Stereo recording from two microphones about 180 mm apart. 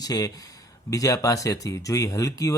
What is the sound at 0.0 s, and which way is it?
Speech, 20° left (ahead or behind).